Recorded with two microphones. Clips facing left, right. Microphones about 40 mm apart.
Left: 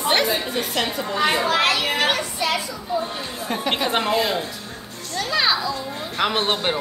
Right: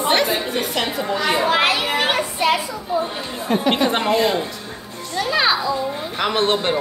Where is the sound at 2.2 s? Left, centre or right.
Right.